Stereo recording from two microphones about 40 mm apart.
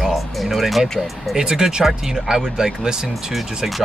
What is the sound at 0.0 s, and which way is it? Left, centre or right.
Speech, centre.